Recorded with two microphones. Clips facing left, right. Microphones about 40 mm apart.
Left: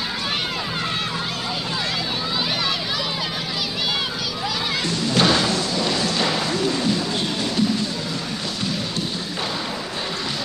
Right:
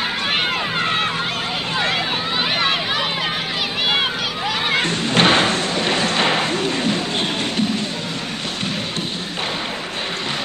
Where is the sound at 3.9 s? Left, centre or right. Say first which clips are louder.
Right 5 dB; right.